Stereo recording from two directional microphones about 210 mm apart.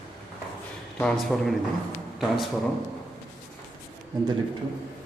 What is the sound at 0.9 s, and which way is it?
Speech, 5° left (ahead or behind).